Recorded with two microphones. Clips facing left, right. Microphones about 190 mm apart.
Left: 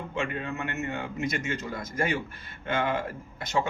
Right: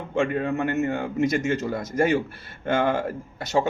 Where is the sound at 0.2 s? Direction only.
50° right (ahead or behind).